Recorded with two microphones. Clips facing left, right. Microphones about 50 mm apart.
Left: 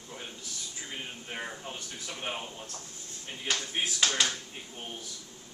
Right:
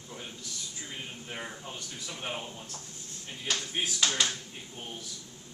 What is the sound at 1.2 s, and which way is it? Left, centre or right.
Speech, centre.